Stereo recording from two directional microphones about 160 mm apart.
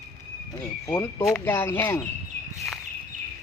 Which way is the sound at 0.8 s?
20° left (ahead or behind).